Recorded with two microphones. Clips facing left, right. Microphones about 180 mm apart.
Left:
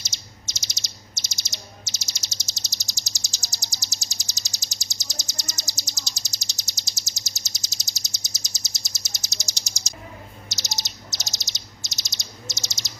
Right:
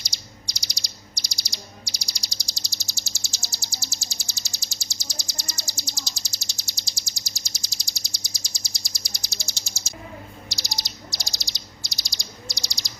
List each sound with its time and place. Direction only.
0.4 s bird: 20° left (ahead or behind)